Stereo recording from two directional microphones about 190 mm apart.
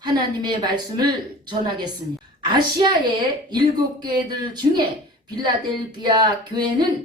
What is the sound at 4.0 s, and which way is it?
Speech, 20° right (ahead or behind).